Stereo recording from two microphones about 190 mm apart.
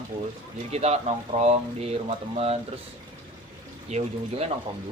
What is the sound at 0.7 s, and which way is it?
A woman's voice, 35° right (ahead or behind).